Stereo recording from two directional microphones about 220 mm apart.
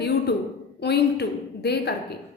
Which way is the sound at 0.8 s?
50° left (ahead or behind).